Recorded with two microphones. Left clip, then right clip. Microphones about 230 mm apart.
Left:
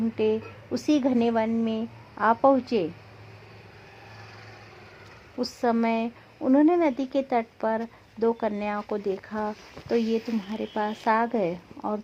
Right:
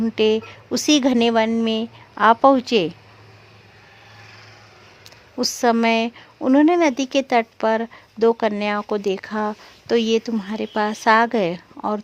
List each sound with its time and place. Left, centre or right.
0.2 s a woman's voice: right
5.4 s a woman's voice: right